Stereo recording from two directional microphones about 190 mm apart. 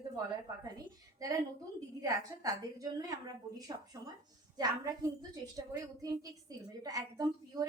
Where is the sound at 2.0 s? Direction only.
20° right (ahead or behind).